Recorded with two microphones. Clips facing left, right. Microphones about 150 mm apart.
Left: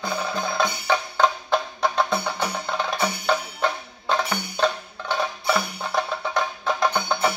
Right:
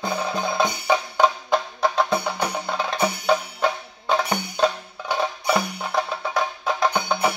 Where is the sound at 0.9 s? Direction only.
5° right (ahead or behind).